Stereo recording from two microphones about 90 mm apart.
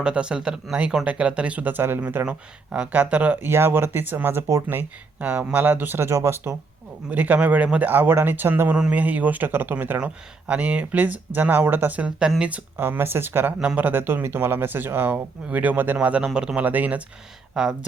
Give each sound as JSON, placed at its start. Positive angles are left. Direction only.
{"t": 0.0, "sound": "speech", "side_deg": -10}
{"t": 7.1, "sound": "speech", "side_deg": -20}
{"t": 16.6, "sound": "speech", "side_deg": -20}
{"t": 17.5, "sound": "speech", "side_deg": -5}